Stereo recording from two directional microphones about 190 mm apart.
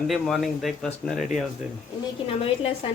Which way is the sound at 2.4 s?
30° left (ahead or behind).